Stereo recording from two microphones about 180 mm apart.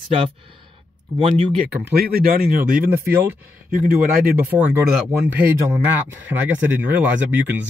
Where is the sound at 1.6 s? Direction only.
60° right (ahead or behind).